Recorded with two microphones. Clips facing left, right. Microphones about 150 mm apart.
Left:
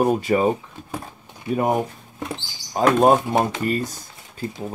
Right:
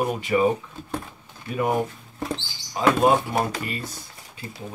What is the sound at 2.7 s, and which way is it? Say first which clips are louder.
Speech: left 3 dB; 40° left (ahead or behind).